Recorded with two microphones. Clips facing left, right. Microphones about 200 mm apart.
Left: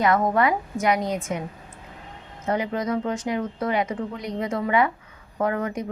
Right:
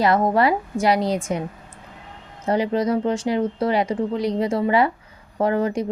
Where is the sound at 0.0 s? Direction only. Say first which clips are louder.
Right 3 dB; 30° right (ahead or behind).